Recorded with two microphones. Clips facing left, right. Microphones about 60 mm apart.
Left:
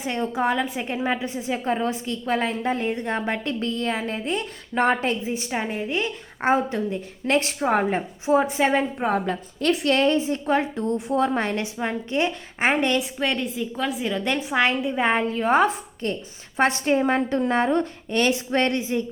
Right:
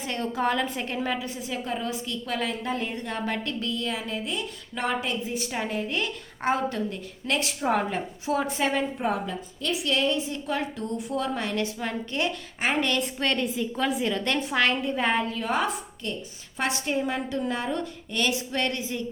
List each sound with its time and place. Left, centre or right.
0.0 s a woman's voice: left
5.2 s a woman's voice: left
7.3 s a woman's voice: left
9.0 s a woman's voice: left
10.2 s a woman's voice: left
13.0 s a woman's voice: centre
14.5 s a woman's voice: centre
15.1 s a woman's voice: left